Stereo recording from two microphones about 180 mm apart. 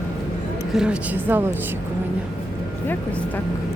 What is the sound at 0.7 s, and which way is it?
Speech, 5° right (ahead or behind).